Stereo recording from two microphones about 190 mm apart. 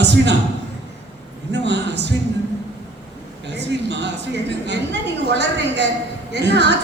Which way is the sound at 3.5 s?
65° right (ahead or behind).